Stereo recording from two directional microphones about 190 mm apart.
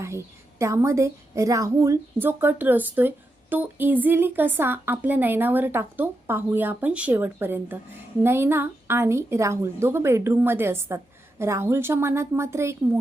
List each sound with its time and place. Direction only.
0.6 s a woman's voice: 15° right (ahead or behind)